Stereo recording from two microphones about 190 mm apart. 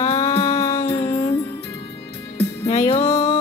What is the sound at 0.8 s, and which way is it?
Music, 15° left (ahead or behind).